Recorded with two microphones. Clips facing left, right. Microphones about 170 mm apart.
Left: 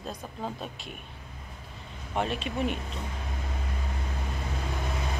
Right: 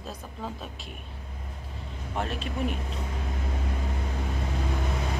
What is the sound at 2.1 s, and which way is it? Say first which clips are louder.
Speech: left 2 dB; centre (ahead or behind).